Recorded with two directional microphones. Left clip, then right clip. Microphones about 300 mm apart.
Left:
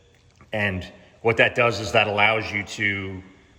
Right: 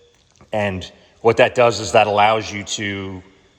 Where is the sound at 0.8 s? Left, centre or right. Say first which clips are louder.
Right 7 dB; centre.